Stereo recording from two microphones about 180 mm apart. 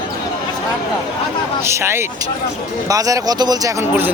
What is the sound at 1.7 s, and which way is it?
Speech, 15° right (ahead or behind).